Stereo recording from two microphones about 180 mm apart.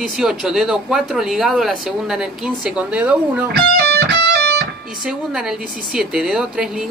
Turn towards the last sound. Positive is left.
turn(degrees=0)  # may be behind; listen again after turning